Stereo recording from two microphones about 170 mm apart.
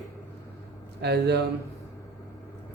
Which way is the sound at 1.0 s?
75° right (ahead or behind).